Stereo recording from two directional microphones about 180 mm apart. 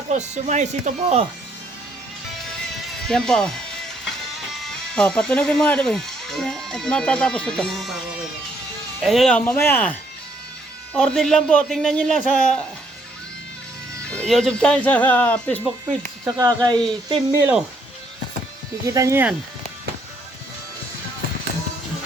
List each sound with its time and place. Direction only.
0.1 s speech: 40° right (ahead or behind)
3.1 s speech: 5° left (ahead or behind)
9.0 s a man's voice: centre (ahead or behind)
14.1 s speech: 5° left (ahead or behind)
16.2 s speech: 20° right (ahead or behind)
18.9 s speech: 15° right (ahead or behind)